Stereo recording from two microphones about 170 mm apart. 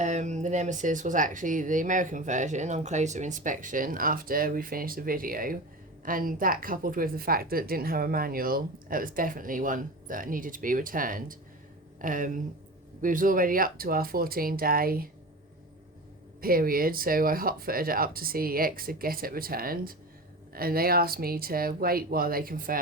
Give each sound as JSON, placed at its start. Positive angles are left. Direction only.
{"t": 0.0, "sound": "a woman's voice", "side_deg": -45}
{"t": 16.4, "sound": "a woman's voice", "side_deg": -60}